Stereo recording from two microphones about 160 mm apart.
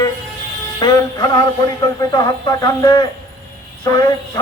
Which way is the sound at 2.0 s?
20° left (ahead or behind).